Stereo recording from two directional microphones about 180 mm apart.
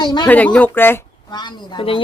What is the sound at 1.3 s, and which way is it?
Speech, 25° left (ahead or behind).